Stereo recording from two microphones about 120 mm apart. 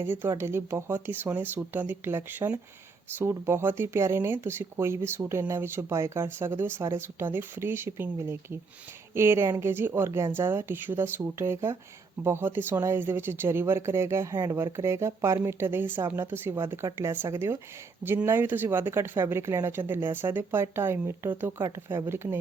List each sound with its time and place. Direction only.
0.0 s speech: 20° right (ahead or behind)
14.3 s speech: 30° right (ahead or behind)